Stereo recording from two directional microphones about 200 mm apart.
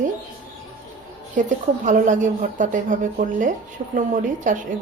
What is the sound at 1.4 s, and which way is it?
A woman's voice, 40° right (ahead or behind).